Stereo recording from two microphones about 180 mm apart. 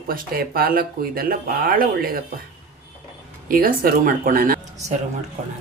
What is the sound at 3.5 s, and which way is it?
Speech, 50° right (ahead or behind).